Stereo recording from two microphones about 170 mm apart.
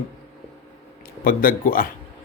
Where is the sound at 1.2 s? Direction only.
55° left (ahead or behind).